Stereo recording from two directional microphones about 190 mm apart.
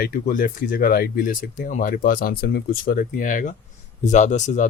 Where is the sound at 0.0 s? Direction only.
50° left (ahead or behind).